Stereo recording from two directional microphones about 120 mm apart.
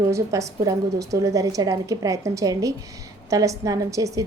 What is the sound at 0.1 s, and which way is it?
A woman's voice, 25° right (ahead or behind).